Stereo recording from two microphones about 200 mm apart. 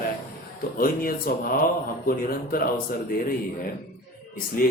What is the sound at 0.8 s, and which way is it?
Speech, 45° left (ahead or behind).